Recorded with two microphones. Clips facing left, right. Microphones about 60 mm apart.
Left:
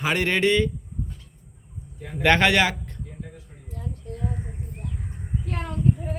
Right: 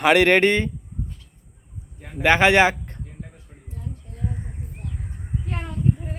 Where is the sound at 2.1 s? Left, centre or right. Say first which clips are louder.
Right 2 dB; centre.